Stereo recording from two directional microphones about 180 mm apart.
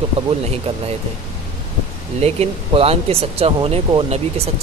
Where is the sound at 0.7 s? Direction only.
35° right (ahead or behind).